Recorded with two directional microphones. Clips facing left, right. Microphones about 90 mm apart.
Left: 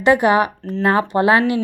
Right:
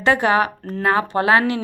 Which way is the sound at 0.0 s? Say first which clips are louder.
Left 3 dB; 15° left (ahead or behind).